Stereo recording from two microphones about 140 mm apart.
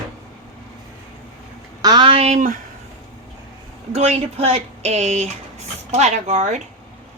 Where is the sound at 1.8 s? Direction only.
35° right (ahead or behind); by 2.5 s 55° right (ahead or behind).